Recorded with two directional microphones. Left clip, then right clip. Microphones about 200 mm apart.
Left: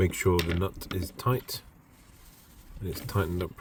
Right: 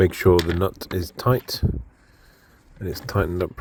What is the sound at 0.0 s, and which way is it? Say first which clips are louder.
Speech: right 9 dB; 35° right (ahead or behind).